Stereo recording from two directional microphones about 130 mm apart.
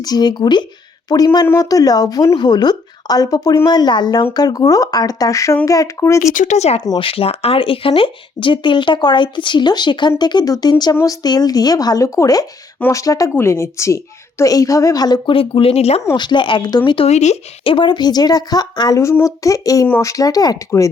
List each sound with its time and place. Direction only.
0.0 s a woman's voice: 30° left (ahead or behind)
6.3 s a woman's voice: 70° left (ahead or behind); by 15.4 s 30° left (ahead or behind)
15.4 s speech: 45° left (ahead or behind)
16.1 s speech: 35° left (ahead or behind)
17.1 s speech: 60° left (ahead or behind)
17.7 s a woman's voice: 40° left (ahead or behind)